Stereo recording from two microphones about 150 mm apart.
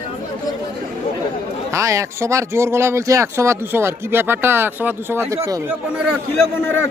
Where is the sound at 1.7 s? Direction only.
20° right (ahead or behind).